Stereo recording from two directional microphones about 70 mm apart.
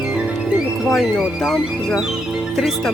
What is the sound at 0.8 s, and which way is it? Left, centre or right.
Speech, centre.